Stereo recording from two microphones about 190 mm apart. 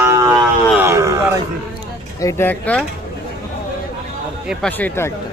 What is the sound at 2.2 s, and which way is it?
Speech, 15° left (ahead or behind).